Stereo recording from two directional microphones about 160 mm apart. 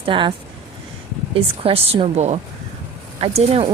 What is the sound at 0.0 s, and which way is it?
Speech, 35° right (ahead or behind).